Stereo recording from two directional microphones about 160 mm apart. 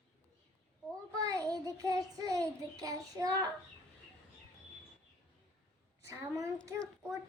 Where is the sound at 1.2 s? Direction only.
20° right (ahead or behind).